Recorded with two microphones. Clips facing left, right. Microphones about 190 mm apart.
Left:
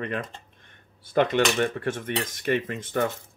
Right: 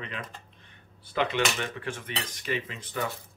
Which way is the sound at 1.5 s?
50° left (ahead or behind).